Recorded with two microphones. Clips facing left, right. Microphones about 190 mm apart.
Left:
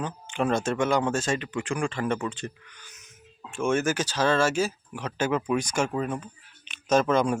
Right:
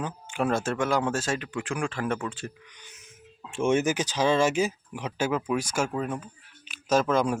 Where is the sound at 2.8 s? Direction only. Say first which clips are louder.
Right 1 dB; 20° right (ahead or behind).